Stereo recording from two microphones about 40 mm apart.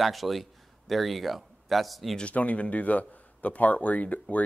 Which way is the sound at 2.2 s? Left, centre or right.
Left.